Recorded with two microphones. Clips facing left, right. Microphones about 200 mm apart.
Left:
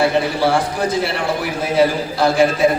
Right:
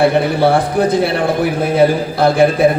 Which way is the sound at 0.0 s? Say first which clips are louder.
Right 4 dB; 60° right (ahead or behind).